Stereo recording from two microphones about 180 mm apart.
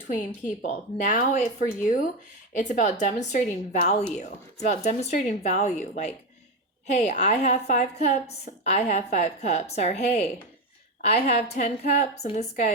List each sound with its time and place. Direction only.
0.6 s a woman's voice: 45° left (ahead or behind)